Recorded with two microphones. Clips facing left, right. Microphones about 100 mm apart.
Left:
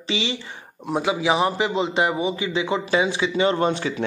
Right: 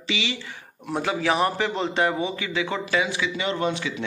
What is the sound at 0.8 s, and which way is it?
A man's voice, 15° left (ahead or behind).